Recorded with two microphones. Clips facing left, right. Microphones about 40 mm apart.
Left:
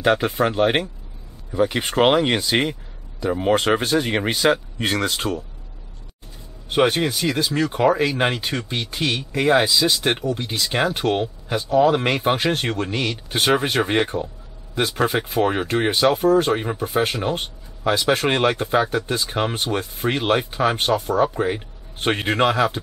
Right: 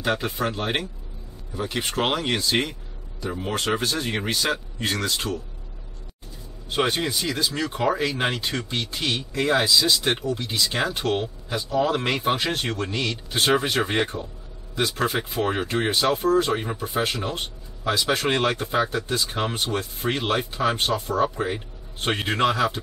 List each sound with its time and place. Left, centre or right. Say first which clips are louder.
0.0 s speech: left 6 dB; left
6.7 s speech: left 5 dB; left